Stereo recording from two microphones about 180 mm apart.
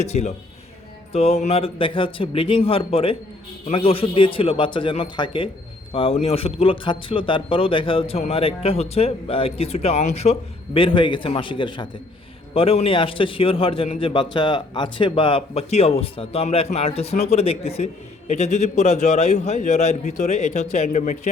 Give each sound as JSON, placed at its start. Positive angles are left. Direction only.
{"t": 0.0, "sound": "a man's voice", "side_deg": 40}
{"t": 10.8, "sound": "a man's voice", "side_deg": 30}